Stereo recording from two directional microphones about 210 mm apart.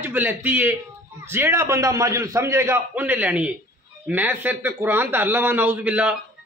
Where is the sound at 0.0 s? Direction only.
10° right (ahead or behind).